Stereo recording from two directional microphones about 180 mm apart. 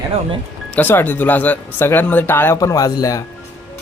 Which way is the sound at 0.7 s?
10° left (ahead or behind).